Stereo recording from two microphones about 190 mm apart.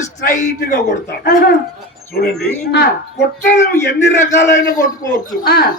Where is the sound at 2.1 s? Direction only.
55° left (ahead or behind).